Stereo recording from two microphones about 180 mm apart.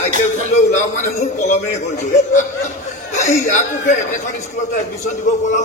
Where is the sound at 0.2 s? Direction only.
40° left (ahead or behind).